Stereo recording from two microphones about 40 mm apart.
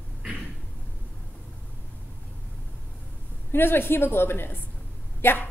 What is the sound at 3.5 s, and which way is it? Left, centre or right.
A woman's voice, left.